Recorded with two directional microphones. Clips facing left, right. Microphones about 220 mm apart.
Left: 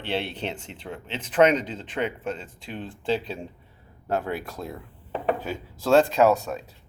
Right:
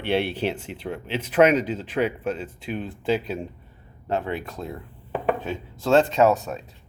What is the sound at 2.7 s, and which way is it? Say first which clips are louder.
Speech: right 3 dB; 30° left (ahead or behind).